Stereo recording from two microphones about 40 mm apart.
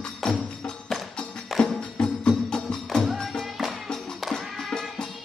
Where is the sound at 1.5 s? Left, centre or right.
Centre.